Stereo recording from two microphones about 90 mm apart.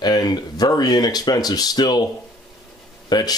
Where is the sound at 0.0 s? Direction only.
50° left (ahead or behind).